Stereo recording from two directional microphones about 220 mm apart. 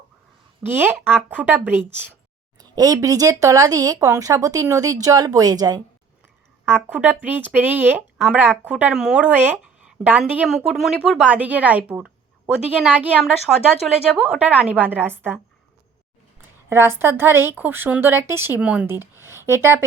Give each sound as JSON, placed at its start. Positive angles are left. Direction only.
{"t": 0.6, "sound": "speech", "side_deg": -10}
{"t": 16.6, "sound": "speech", "side_deg": -10}
{"t": 19.2, "sound": "a sound", "side_deg": -10}